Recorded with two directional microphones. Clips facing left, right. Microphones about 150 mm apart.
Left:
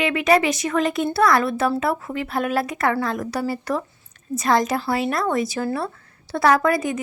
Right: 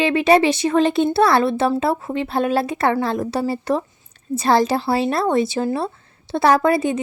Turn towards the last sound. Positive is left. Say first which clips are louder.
# right 2 dB
turn(degrees=-25)  # may be behind; listen again after turning